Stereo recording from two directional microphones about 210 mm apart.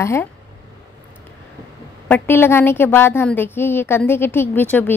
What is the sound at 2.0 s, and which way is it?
A woman's voice, 10° left (ahead or behind).